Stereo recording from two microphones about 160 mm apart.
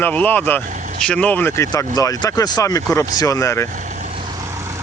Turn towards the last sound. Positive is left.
turn(degrees=15)  # may be behind; listen again after turning